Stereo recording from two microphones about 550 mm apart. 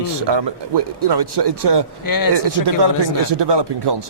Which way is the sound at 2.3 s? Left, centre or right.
Right.